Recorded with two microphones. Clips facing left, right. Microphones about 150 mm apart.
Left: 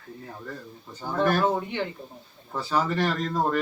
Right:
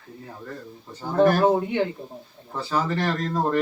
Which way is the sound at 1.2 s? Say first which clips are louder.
Right 5 dB; 40° right (ahead or behind).